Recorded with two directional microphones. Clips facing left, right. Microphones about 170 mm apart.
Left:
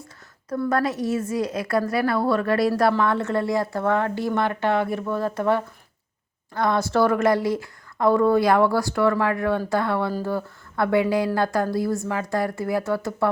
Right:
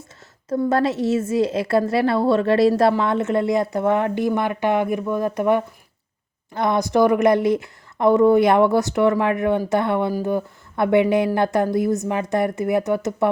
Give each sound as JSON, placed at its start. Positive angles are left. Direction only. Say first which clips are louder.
{"t": 0.4, "sound": "a woman's voice", "louder": "right 4 dB", "side_deg": -25}